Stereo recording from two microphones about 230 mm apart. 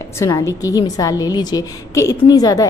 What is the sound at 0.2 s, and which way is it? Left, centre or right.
A woman's voice, centre.